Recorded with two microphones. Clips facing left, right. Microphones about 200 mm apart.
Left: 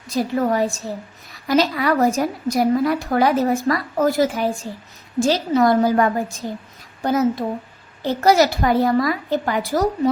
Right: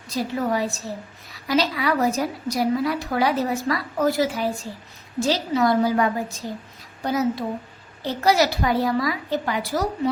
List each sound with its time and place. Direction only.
0.1 s a woman's voice: 50° left (ahead or behind)